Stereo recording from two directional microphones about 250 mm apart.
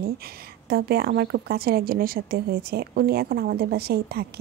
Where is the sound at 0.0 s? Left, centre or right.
Right.